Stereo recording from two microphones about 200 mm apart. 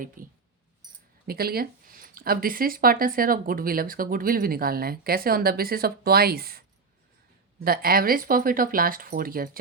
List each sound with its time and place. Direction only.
0.2 s speech: 45° right (ahead or behind)